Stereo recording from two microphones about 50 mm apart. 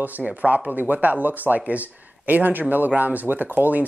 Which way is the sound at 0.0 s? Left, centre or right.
Right.